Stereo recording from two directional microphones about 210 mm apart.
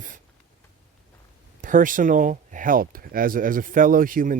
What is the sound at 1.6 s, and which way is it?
Speech, 40° right (ahead or behind).